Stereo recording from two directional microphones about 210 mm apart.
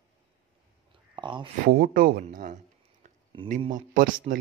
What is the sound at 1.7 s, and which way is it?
A man's voice, 45° right (ahead or behind).